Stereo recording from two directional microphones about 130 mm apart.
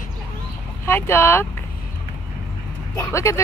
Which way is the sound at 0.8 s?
20° left (ahead or behind).